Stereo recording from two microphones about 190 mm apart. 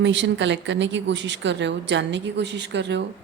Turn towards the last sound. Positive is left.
turn(degrees=-65)  # may be behind; listen again after turning